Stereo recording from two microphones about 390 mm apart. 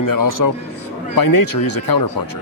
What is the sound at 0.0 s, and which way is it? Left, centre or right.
A man's voice, left.